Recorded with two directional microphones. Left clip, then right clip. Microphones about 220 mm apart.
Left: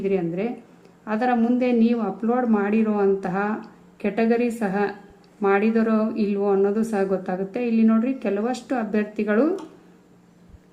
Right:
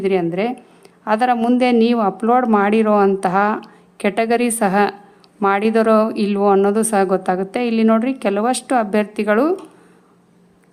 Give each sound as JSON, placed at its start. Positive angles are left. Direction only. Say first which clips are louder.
{"t": 0.0, "sound": "a woman's voice", "louder": "right 6 dB", "side_deg": -40}